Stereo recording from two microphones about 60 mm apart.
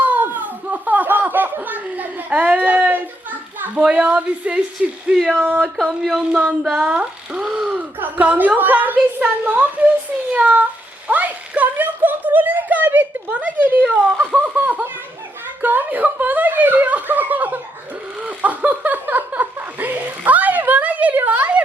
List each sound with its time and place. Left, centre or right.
0.0 s laughter: right
3.8 s speech: centre
5.3 s speech: right
5.7 s speech: centre
6.3 s speech: centre
7.9 s a woman's voice: right
11.1 s a sound: right
13.7 s speech: right
18.2 s chuckle: right